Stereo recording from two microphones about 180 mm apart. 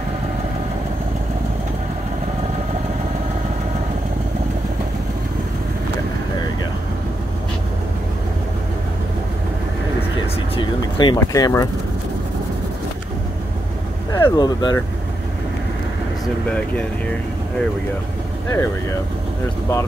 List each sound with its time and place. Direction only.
10.5 s a sound: 25° left (ahead or behind)
14.1 s speech: 20° left (ahead or behind)
16.4 s speech: 5° left (ahead or behind)
18.5 s speech: 15° left (ahead or behind)